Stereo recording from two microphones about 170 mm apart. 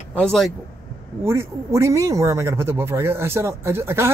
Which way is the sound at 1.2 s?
15° right (ahead or behind).